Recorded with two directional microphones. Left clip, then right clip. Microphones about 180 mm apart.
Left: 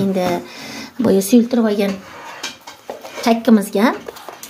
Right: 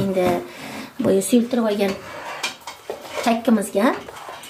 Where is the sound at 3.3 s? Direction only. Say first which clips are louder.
Left 5 dB; 55° left (ahead or behind).